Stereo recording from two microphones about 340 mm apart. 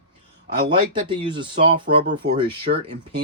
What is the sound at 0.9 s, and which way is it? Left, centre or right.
Speech, centre.